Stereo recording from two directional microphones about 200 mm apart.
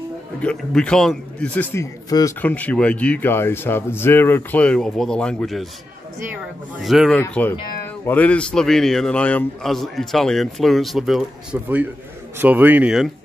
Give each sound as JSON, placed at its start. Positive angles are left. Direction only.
{"t": 0.4, "sound": "a man's voice", "side_deg": 5}
{"t": 6.8, "sound": "a man's voice", "side_deg": 0}